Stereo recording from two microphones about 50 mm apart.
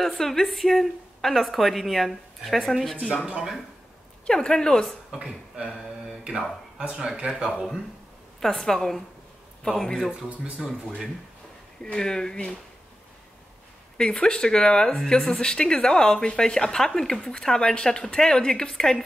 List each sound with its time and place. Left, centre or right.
0.0 s speech: centre
4.3 s speech: centre
5.1 s speech: centre
7.0 s speech: centre
7.5 s speech: centre
8.4 s speech: centre
10.1 s speech: right
11.8 s speech: centre
13.9 s speech: centre